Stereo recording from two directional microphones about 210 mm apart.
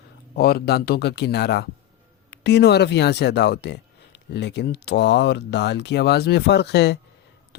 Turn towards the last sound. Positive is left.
turn(degrees=50)  # may be behind; listen again after turning